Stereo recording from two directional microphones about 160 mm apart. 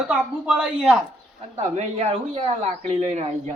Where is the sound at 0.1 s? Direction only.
5° right (ahead or behind).